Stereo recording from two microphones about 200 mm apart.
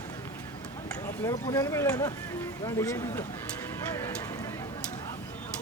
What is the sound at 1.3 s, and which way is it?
Speech, 15° left (ahead or behind).